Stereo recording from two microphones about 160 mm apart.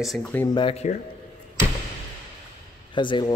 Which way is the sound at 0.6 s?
35° left (ahead or behind).